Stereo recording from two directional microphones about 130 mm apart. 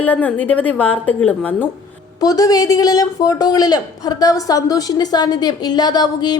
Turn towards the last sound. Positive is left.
turn(degrees=30)  # may be behind; listen again after turning